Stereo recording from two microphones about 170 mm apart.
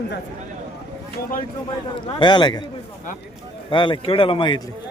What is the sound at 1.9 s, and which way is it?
Speech, 30° left (ahead or behind).